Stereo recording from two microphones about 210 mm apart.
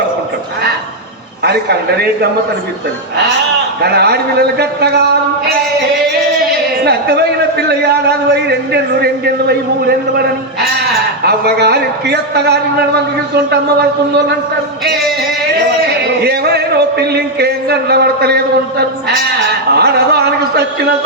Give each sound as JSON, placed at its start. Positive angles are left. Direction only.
{"t": 1.5, "sound": "a man's voice", "side_deg": -50}
{"t": 3.8, "sound": "a man's voice", "side_deg": -50}
{"t": 6.8, "sound": "a man's voice", "side_deg": -50}
{"t": 15.9, "sound": "a sound", "side_deg": -50}
{"t": 19.7, "sound": "a man's voice", "side_deg": -50}